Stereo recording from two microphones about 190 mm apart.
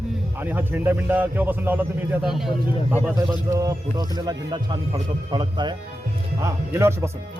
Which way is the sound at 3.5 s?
15° right (ahead or behind).